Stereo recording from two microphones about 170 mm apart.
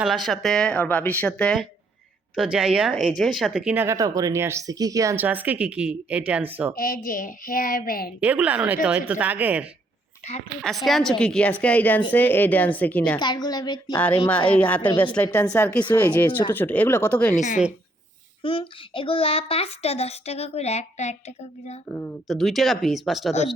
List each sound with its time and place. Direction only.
0.0 s speech: centre (ahead or behind)
6.7 s a woman's voice: 55° left (ahead or behind)
8.2 s a woman's voice: 10° right (ahead or behind); by 13.1 s 10° left (ahead or behind)
13.1 s a woman's voice: 25° left (ahead or behind)
14.3 s a woman's voice: 10° left (ahead or behind)
17.3 s a woman's voice: 45° left (ahead or behind)
18.4 s a child's voice: 30° left (ahead or behind)
21.8 s speech: 5° left (ahead or behind)